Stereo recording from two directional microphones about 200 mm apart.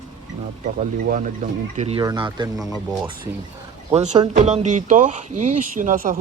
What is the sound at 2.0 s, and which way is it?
Speech, 20° right (ahead or behind).